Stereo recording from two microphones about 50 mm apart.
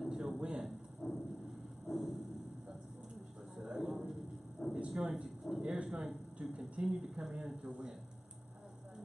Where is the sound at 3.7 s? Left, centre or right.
Centre.